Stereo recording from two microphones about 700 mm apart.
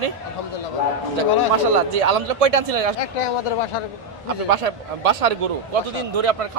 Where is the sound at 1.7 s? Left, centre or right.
Right.